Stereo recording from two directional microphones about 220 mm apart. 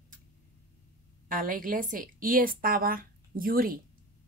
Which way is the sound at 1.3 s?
40° right (ahead or behind).